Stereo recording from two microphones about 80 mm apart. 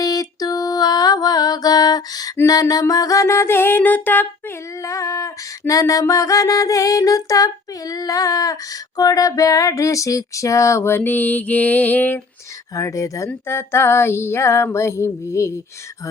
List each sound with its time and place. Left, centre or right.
0.0 s mantra: left
2.5 s female singing: left
4.8 s a sound: left
12.7 s female singing: left